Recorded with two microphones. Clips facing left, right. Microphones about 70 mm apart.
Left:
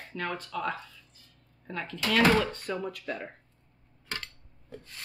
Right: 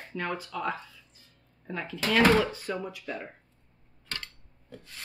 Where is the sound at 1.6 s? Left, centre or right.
Centre.